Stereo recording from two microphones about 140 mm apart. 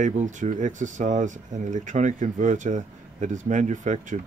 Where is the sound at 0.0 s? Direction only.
60° right (ahead or behind).